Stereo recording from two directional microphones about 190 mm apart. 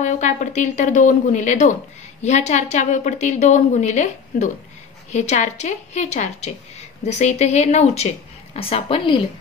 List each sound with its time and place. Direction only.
0.0 s a woman's voice: 40° left (ahead or behind)